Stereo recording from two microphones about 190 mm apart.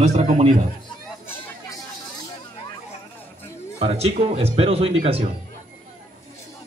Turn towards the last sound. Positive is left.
turn(degrees=-30)  # may be behind; listen again after turning